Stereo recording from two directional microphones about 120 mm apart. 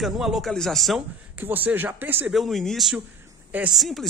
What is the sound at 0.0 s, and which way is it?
Speech, centre (ahead or behind).